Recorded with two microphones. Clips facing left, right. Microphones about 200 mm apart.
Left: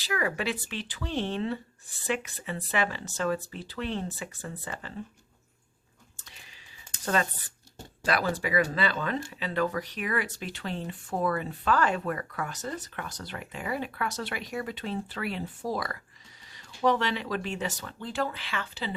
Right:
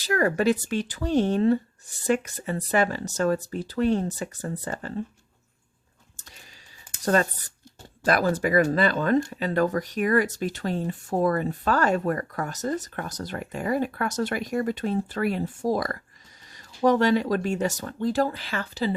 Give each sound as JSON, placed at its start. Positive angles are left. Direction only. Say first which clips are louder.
{"t": 0.0, "sound": "speech", "louder": "right 8 dB", "side_deg": -45}
{"t": 7.0, "sound": "speech", "louder": "right 6 dB", "side_deg": -40}